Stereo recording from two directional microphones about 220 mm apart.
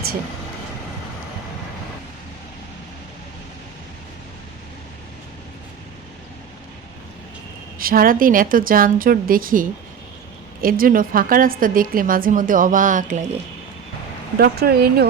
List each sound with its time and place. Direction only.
7.8 s a woman's voice: 40° right (ahead or behind)